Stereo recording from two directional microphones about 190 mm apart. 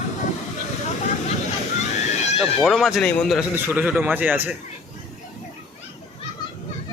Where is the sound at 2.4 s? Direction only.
Centre (ahead or behind).